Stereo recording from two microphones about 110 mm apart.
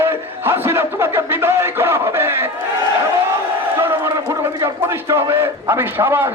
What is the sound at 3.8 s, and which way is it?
A man's voice, 25° right (ahead or behind).